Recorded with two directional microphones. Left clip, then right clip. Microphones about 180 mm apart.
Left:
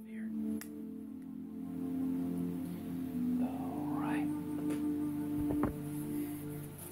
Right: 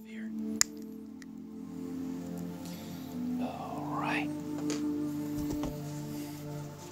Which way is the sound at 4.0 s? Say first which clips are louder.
Right 5 dB; 30° right (ahead or behind).